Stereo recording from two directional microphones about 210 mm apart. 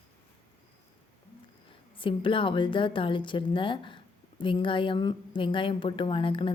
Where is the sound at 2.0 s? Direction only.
25° left (ahead or behind).